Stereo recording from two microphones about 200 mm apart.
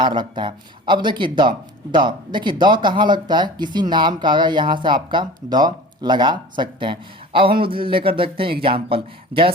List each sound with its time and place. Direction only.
0.0 s speech: 25° right (ahead or behind)